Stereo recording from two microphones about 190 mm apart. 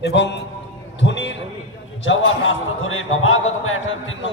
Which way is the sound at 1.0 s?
70° left (ahead or behind).